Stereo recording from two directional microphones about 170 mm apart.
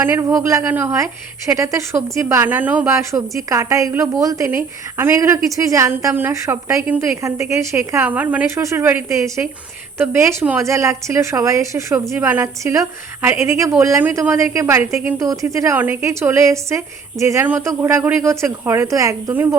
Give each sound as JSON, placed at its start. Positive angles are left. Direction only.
{"t": 0.0, "sound": "a woman's voice", "side_deg": -15}